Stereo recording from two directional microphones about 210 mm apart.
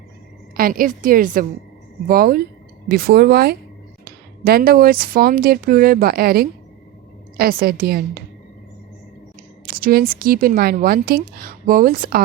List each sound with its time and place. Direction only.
0.5 s a woman's voice: 40° right (ahead or behind)
9.6 s a woman's voice: 45° right (ahead or behind)